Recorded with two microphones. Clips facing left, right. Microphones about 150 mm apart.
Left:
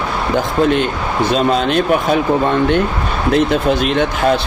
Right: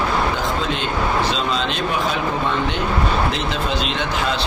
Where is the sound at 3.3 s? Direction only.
55° left (ahead or behind).